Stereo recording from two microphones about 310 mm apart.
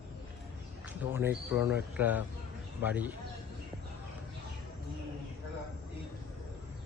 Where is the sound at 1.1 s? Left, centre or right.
Centre.